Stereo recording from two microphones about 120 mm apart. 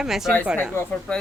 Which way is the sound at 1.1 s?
10° left (ahead or behind).